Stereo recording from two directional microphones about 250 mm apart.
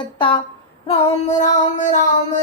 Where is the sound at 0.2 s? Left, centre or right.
Centre.